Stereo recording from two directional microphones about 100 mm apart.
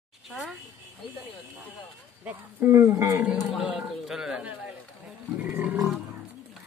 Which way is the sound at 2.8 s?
30° right (ahead or behind).